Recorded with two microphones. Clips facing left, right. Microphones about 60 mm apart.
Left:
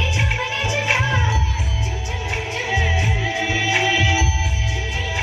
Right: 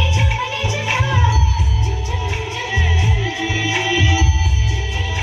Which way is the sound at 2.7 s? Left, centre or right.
Centre.